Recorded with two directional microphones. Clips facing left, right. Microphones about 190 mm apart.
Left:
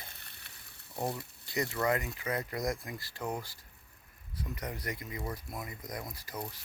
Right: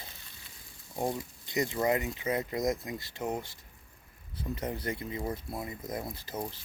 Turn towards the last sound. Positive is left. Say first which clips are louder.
# right 4 dB
turn(degrees=-25)  # may be behind; listen again after turning